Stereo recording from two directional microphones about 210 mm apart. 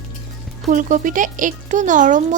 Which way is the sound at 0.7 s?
35° right (ahead or behind).